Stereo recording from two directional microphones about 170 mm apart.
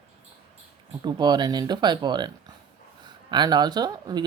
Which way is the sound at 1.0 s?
25° right (ahead or behind).